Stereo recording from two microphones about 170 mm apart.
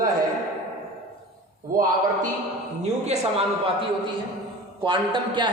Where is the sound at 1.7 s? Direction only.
55° right (ahead or behind).